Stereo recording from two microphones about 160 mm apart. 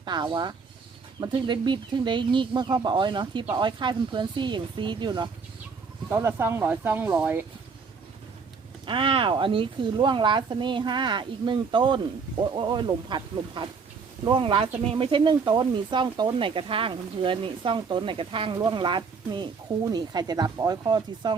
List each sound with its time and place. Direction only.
0.0 s speech: 30° right (ahead or behind)
6.1 s speech: 15° right (ahead or behind)
8.9 s speech: 35° right (ahead or behind)